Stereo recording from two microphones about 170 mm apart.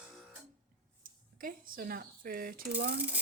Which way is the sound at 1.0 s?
55° right (ahead or behind).